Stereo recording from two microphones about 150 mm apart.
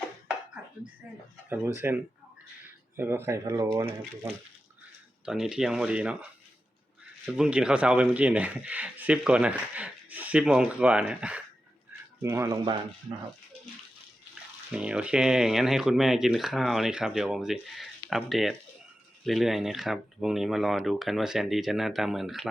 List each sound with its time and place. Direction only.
1.5 s speech: 15° right (ahead or behind)
5.2 s speech: 5° right (ahead or behind)
7.3 s speech: 5° right (ahead or behind)
12.2 s speech: 20° right (ahead or behind)
14.7 s speech: 5° right (ahead or behind)